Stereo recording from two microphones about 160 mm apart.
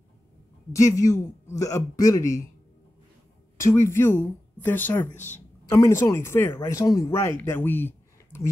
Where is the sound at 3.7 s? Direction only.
15° left (ahead or behind).